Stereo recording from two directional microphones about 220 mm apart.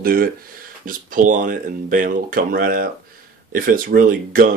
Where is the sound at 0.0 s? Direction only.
40° right (ahead or behind).